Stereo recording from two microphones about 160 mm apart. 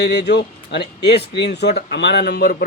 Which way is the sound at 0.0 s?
90° left.